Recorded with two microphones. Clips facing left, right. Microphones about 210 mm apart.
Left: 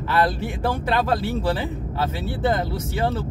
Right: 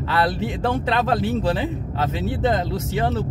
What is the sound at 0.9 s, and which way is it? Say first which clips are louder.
Speech: right 1 dB; 20° right (ahead or behind).